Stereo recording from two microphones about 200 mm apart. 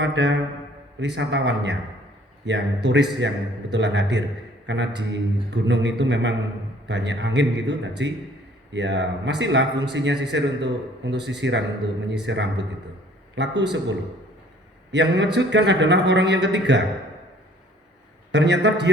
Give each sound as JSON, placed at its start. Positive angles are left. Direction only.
{"t": 0.0, "sound": "a man's voice", "side_deg": -60}
{"t": 14.9, "sound": "a man's voice", "side_deg": -60}
{"t": 18.3, "sound": "a man's voice", "side_deg": -60}